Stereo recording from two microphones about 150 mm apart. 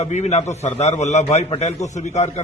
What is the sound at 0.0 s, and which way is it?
A man's voice, 50° left (ahead or behind).